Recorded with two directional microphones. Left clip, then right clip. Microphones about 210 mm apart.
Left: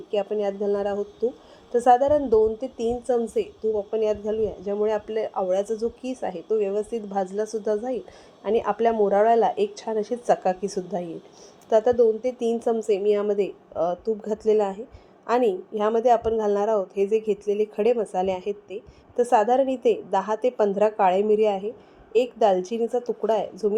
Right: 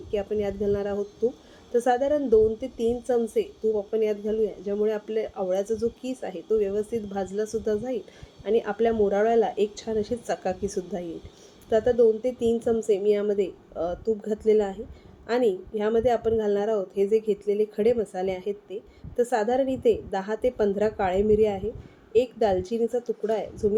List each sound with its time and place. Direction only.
0.1 s speech: centre (ahead or behind)
1.7 s speech: centre (ahead or behind)
3.9 s speech: centre (ahead or behind)